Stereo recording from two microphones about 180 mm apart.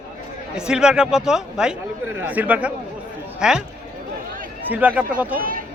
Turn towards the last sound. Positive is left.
turn(degrees=-50)  # may be behind; listen again after turning